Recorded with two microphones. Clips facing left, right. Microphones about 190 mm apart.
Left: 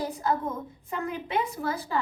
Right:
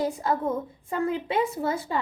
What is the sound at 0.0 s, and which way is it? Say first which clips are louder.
A woman's voice: right 3 dB; 25° right (ahead or behind).